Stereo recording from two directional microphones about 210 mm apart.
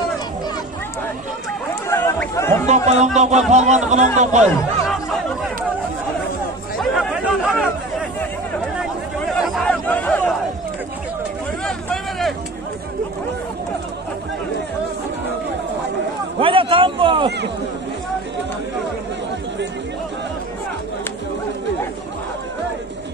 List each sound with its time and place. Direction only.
1.9 s a sound: 10° left (ahead or behind)
2.6 s a man's voice: 35° right (ahead or behind)
4.8 s chatter: centre (ahead or behind)
6.8 s chatter: centre (ahead or behind)
9.3 s chatter: centre (ahead or behind)
11.6 s hubbub: centre (ahead or behind)
16.3 s a sound: 25° right (ahead or behind)